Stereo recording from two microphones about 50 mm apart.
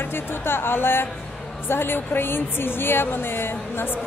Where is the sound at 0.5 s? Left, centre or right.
Left.